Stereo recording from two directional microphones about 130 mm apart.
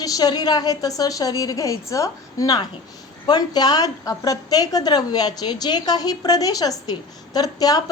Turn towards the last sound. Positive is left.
turn(degrees=30)  # may be behind; listen again after turning